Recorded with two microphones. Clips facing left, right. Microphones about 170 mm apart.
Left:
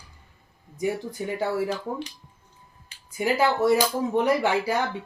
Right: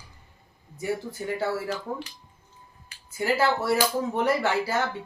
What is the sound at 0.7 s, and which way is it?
Speech, 15° left (ahead or behind).